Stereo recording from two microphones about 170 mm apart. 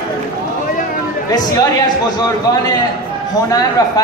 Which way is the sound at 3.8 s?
20° left (ahead or behind).